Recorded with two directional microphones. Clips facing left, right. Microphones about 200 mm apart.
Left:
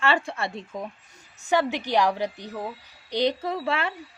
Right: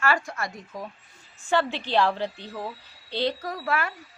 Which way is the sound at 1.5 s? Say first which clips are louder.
Left 1 dB; 15° left (ahead or behind).